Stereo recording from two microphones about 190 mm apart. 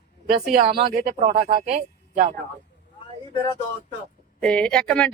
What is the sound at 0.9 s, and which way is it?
Speech, 50° right (ahead or behind).